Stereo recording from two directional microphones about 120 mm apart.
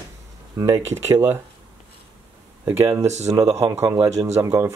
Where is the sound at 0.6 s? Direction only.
25° right (ahead or behind).